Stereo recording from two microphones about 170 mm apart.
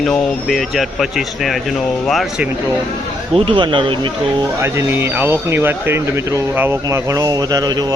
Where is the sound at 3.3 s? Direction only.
30° right (ahead or behind).